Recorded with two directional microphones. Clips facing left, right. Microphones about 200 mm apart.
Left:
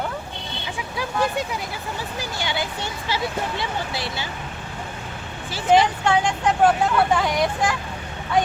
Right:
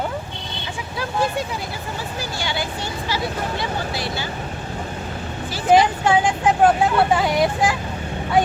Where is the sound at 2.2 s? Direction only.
20° left (ahead or behind).